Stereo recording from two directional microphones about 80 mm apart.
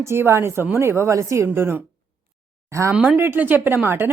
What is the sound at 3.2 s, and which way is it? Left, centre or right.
Speech, right.